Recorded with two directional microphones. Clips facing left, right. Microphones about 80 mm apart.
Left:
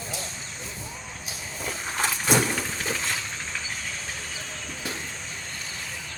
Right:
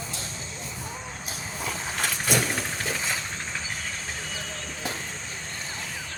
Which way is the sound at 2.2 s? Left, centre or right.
Left.